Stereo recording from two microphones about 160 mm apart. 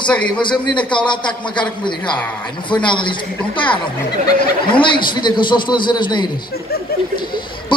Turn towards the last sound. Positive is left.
turn(degrees=30)  # may be behind; listen again after turning